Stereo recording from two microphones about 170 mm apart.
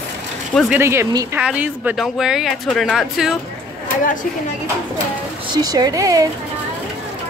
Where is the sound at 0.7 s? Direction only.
15° right (ahead or behind).